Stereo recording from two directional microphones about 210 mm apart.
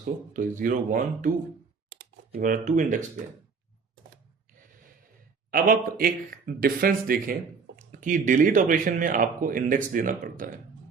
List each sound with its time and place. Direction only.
0.0 s speech: 40° right (ahead or behind)
5.5 s speech: 40° right (ahead or behind)